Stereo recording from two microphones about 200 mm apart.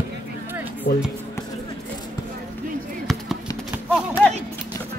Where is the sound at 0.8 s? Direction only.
55° left (ahead or behind).